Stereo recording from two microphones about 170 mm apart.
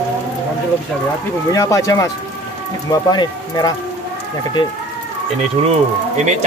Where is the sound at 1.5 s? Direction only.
20° left (ahead or behind).